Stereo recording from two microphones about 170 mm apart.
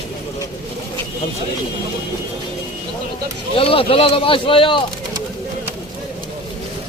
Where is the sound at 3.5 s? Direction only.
35° left (ahead or behind).